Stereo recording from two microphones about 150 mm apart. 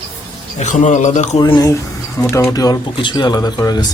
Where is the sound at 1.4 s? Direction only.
30° left (ahead or behind).